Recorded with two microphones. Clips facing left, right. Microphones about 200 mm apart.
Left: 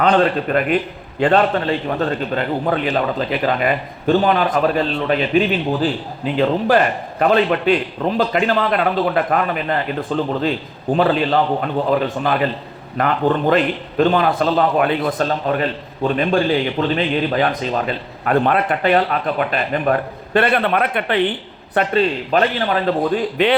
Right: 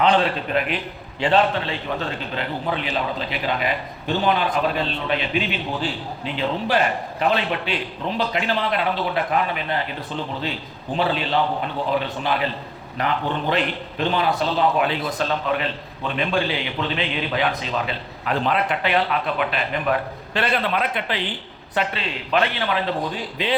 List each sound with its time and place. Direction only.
0.0 s speech: 50° left (ahead or behind)
21.8 s speech: 45° left (ahead or behind)